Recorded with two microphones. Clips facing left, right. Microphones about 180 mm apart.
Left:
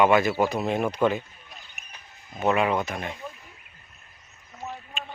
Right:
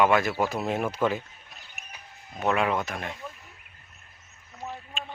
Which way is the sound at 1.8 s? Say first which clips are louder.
Right 4 dB; centre (ahead or behind).